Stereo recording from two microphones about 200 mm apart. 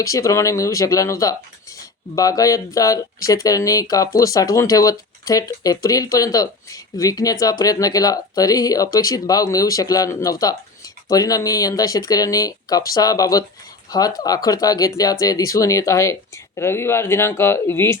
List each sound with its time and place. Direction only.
0.0 s speech: 15° left (ahead or behind)